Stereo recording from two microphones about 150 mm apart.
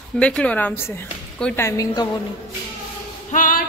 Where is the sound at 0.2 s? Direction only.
10° left (ahead or behind).